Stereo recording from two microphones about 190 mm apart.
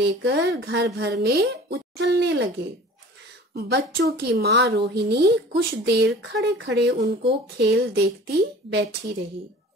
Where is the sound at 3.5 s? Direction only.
55° right (ahead or behind).